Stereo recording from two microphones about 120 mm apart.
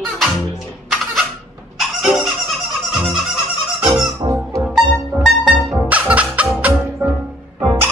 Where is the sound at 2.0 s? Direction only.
5° right (ahead or behind).